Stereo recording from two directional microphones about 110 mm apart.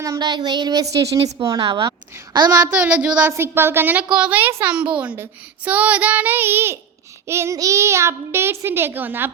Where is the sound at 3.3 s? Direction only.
20° right (ahead or behind).